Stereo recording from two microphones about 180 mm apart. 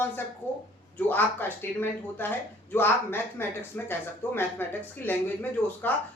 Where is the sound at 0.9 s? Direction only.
10° left (ahead or behind).